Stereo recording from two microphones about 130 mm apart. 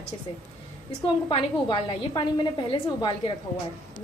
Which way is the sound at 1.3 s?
40° left (ahead or behind).